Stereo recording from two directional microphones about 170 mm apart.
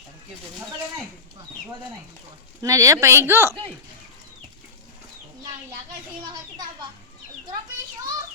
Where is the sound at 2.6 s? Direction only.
20° right (ahead or behind).